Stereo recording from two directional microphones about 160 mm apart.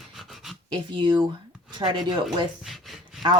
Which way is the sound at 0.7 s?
30° right (ahead or behind).